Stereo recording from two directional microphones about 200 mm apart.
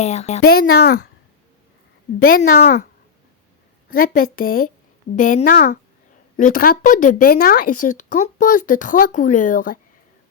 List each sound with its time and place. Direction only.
0.0 s a woman's voice: 35° left (ahead or behind)
0.4 s speech: 50° left (ahead or behind)
2.1 s speech: 45° left (ahead or behind)
3.8 s a woman's voice: 45° left (ahead or behind)